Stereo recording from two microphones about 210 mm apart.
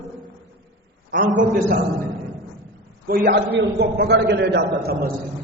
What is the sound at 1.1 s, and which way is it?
Speech, 40° right (ahead or behind).